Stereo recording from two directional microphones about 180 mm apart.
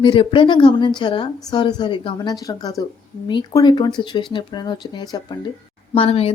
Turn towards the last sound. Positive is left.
turn(degrees=35)  # may be behind; listen again after turning